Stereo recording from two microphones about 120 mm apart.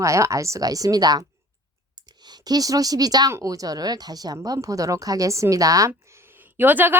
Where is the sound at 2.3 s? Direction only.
35° right (ahead or behind).